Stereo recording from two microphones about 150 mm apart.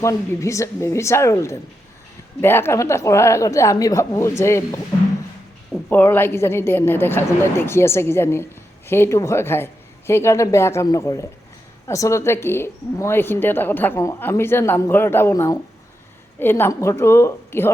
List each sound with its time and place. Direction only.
0.0 s a woman's voice: 20° left (ahead or behind)
5.9 s a woman's voice: 15° left (ahead or behind)